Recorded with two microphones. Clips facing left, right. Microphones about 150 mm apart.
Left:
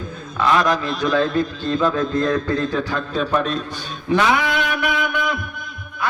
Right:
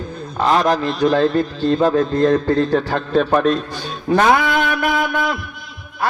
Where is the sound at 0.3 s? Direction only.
40° right (ahead or behind).